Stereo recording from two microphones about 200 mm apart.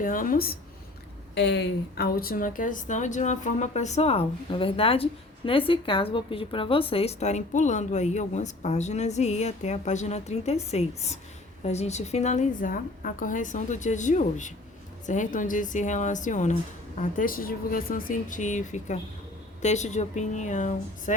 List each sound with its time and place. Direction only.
0.0 s a woman's voice: 45° left (ahead or behind)
1.4 s a woman's voice: 60° left (ahead or behind); by 20.7 s 35° left (ahead or behind)